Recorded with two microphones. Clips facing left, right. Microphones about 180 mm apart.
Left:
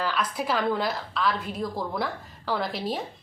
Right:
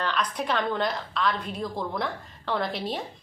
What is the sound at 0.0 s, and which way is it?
A woman's voice, 5° left (ahead or behind).